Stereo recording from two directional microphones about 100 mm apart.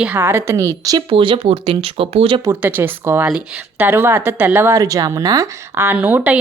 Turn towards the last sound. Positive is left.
turn(degrees=-15)  # may be behind; listen again after turning